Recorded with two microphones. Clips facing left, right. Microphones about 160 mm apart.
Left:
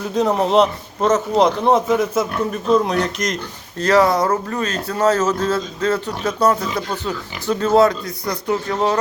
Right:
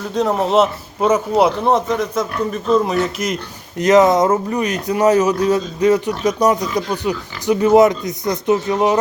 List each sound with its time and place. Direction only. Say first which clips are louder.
0.1 s speech: even; centre (ahead or behind)
3.8 s speech: right 3 dB; 20° right (ahead or behind)